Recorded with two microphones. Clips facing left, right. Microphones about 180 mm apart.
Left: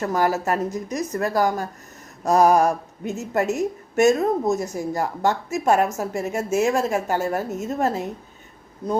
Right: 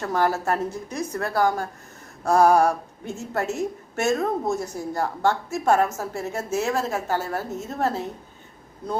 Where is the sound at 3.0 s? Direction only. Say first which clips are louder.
Left 6 dB; 10° left (ahead or behind).